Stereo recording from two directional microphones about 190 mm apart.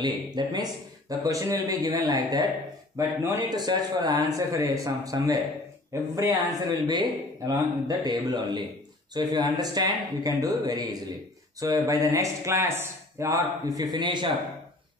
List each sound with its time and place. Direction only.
0.0 s speech: 20° right (ahead or behind)